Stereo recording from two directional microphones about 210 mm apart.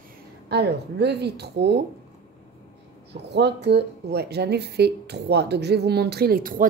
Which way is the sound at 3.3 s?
55° right (ahead or behind).